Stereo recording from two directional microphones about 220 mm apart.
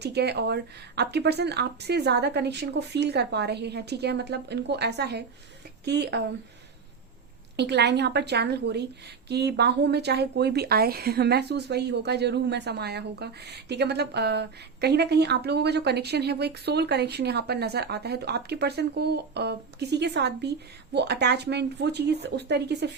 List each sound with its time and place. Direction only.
0.0 s a woman's voice: 50° right (ahead or behind)
7.5 s a woman's voice: 50° right (ahead or behind)